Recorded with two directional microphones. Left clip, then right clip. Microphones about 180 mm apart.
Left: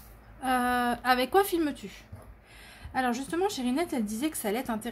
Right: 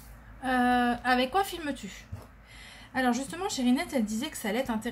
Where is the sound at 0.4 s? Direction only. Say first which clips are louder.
Right 1 dB; 45° left (ahead or behind).